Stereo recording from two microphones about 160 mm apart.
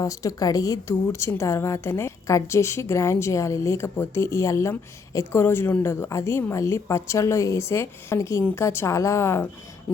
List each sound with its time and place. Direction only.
0.0 s a woman's voice: 20° left (ahead or behind)